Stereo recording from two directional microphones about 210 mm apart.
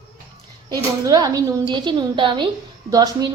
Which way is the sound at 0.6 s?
20° right (ahead or behind).